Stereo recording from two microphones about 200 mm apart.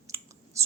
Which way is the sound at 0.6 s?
15° right (ahead or behind).